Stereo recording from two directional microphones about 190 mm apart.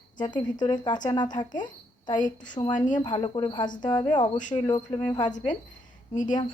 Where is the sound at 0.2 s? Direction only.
20° left (ahead or behind).